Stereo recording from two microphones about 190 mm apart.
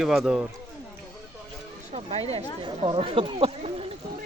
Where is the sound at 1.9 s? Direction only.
30° right (ahead or behind).